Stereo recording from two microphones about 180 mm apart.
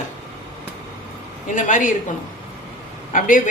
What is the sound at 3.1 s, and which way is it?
Speech, 45° left (ahead or behind).